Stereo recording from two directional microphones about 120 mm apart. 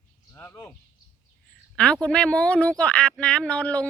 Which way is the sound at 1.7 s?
10° left (ahead or behind).